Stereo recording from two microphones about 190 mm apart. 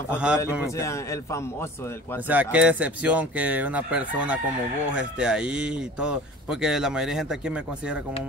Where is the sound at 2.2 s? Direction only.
10° right (ahead or behind).